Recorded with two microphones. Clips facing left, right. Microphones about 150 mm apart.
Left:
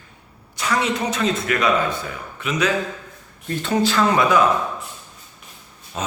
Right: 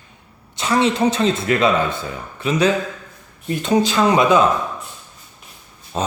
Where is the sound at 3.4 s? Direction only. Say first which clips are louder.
Right 3 dB; 20° right (ahead or behind).